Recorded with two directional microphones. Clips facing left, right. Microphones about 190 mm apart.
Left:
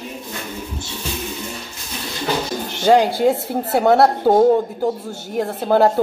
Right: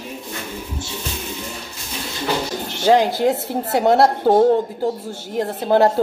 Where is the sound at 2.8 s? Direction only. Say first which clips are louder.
Left 1 dB; centre (ahead or behind).